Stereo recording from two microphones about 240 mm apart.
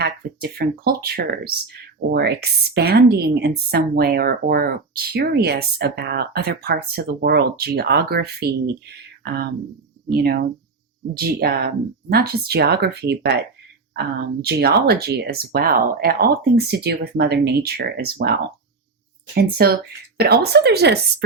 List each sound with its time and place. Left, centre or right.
0.0 s speech: right
10.1 s speech: right
14.4 s speech: right